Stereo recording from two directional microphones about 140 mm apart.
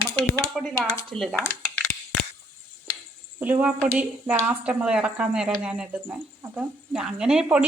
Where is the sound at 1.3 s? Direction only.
15° left (ahead or behind).